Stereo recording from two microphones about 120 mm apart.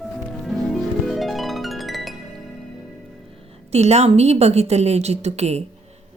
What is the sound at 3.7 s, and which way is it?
A woman's voice, 65° right (ahead or behind).